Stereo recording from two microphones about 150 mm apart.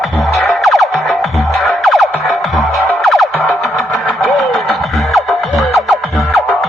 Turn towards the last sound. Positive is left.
turn(degrees=0)  # may be behind; listen again after turning